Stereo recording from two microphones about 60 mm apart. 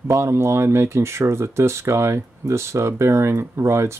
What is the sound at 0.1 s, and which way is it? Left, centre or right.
Speech, right.